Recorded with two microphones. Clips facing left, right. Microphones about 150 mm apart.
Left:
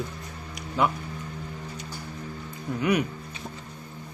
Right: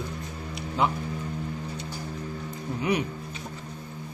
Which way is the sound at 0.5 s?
25° right (ahead or behind).